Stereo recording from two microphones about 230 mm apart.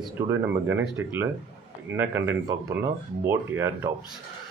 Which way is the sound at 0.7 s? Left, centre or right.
Centre.